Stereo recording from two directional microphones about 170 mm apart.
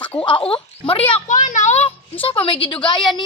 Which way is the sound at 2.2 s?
30° left (ahead or behind).